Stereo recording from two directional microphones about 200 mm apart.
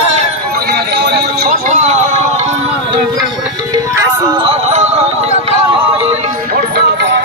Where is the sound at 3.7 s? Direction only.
15° right (ahead or behind); by 6.6 s 35° right (ahead or behind).